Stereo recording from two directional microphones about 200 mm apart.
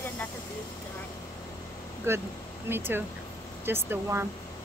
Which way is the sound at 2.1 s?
15° right (ahead or behind).